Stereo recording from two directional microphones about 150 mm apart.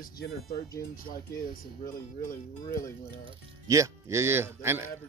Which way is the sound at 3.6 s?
20° right (ahead or behind).